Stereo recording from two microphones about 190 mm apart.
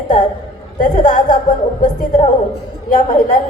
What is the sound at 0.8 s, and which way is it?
A woman's voice, 40° left (ahead or behind).